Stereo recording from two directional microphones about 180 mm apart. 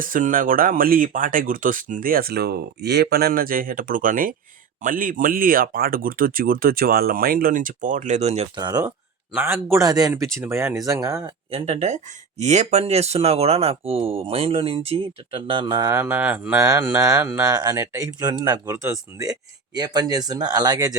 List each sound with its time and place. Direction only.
0.0 s speech: 50° right (ahead or behind)
8.5 s speech: 20° right (ahead or behind)
9.3 s speech: 10° right (ahead or behind)
11.5 s speech: 35° right (ahead or behind); by 20.9 s 20° right (ahead or behind)